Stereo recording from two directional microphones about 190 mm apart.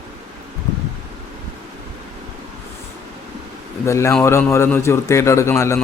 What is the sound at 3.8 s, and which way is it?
A man's voice, 15° left (ahead or behind).